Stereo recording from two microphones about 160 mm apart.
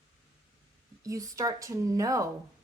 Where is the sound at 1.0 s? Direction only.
20° right (ahead or behind).